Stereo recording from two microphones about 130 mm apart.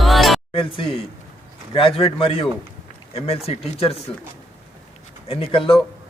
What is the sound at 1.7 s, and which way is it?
A man's voice, 45° left (ahead or behind).